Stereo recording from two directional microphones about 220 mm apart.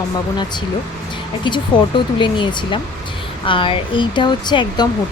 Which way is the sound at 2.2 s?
20° left (ahead or behind).